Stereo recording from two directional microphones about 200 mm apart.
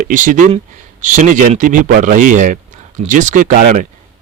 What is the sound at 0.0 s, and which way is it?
Speech, 40° right (ahead or behind).